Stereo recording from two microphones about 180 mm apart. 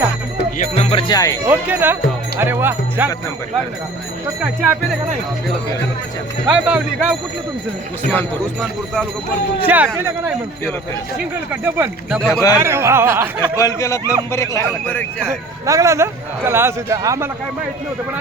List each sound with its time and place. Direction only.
0.8 s speech: 30° left (ahead or behind)
1.5 s a man's voice: 10° right (ahead or behind)
4.6 s a man's voice: 10° right (ahead or behind)
6.5 s speech: 5° right (ahead or behind)
9.6 s a man's voice: 10° right (ahead or behind)
11.6 s a man's voice: 10° right (ahead or behind)
12.3 s speech: 20° left (ahead or behind)
12.5 s a man's voice: 15° right (ahead or behind)
13.6 s a man's voice: 15° left (ahead or behind)
15.3 s a man's voice: 15° right (ahead or behind)